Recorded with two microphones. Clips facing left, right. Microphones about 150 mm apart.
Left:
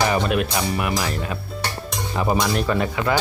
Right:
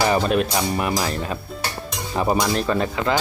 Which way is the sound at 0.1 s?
35° right (ahead or behind).